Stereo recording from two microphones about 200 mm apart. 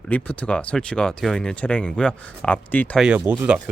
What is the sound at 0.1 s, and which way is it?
Speech, 5° left (ahead or behind).